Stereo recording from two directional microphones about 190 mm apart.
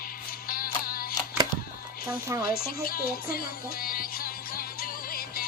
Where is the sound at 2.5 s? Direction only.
50° left (ahead or behind).